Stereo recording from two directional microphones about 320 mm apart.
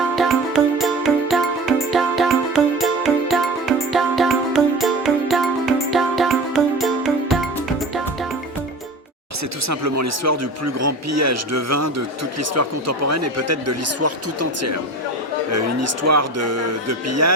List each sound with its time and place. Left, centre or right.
0.2 s music: centre
9.6 s a man's voice: right